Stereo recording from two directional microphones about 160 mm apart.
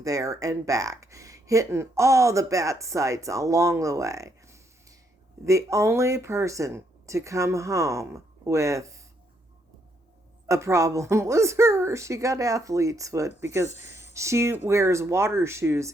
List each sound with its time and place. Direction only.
0.0 s speech: 20° right (ahead or behind)
10.5 s speech: 20° right (ahead or behind)